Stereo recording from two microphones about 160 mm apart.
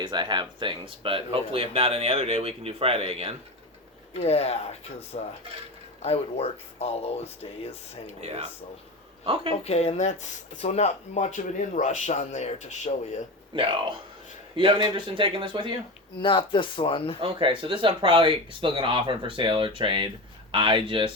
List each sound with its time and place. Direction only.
0.0 s speech: 30° right (ahead or behind)
4.2 s speech: 40° left (ahead or behind)
8.2 s speech: 40° right (ahead or behind)
9.6 s speech: 40° left (ahead or behind)
13.5 s speech: 30° right (ahead or behind)
16.2 s speech: 30° left (ahead or behind)
17.2 s speech: 35° right (ahead or behind)